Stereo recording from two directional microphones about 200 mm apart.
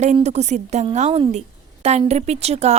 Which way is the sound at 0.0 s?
35° right (ahead or behind).